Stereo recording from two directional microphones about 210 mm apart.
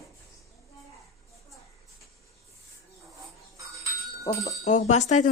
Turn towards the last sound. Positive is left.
turn(degrees=35)  # may be behind; listen again after turning